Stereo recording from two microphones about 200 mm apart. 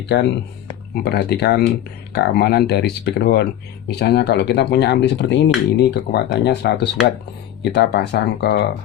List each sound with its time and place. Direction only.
0.0 s speech: 55° left (ahead or behind)